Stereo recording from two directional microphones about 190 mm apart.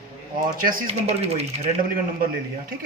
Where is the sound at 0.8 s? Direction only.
35° right (ahead or behind).